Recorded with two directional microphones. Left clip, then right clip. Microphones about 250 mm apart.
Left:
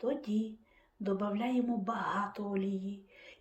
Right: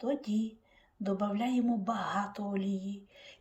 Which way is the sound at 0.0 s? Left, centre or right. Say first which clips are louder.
Right 1 dB; centre.